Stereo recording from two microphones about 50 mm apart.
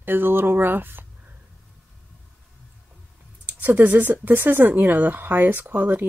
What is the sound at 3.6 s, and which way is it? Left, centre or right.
Speech, right.